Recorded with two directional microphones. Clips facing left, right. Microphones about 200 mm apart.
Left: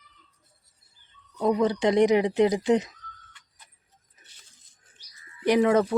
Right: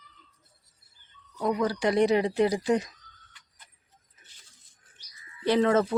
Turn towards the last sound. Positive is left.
turn(degrees=15)  # may be behind; listen again after turning